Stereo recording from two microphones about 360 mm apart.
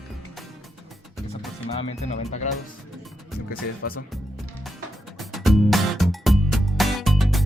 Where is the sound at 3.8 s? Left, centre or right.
Left.